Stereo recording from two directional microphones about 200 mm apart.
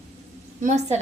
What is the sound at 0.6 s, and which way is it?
Speech, 35° right (ahead or behind).